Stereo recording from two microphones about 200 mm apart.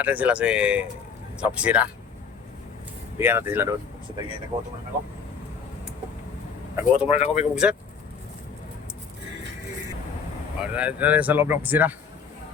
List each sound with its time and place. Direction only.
0.0 s speech: 5° right (ahead or behind)
3.2 s speech: 10° right (ahead or behind)
6.7 s speech: 5° right (ahead or behind)
7.1 s speech: 35° left (ahead or behind)
7.5 s speech: 5° right (ahead or behind)
10.6 s speech: 5° right (ahead or behind)